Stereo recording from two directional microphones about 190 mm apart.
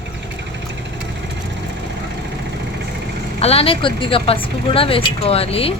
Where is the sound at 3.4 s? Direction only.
30° left (ahead or behind).